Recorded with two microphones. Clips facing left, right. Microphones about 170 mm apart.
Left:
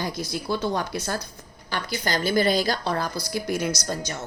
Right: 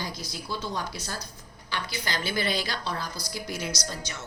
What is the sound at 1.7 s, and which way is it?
A woman's voice, 45° left (ahead or behind).